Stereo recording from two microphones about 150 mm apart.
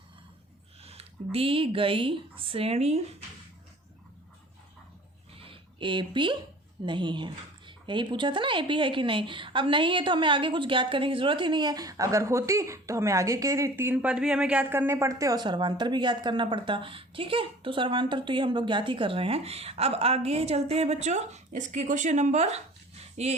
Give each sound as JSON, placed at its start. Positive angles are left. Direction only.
{"t": 0.8, "sound": "speech", "side_deg": -40}
{"t": 5.4, "sound": "a sound", "side_deg": -35}
{"t": 6.8, "sound": "speech", "side_deg": -30}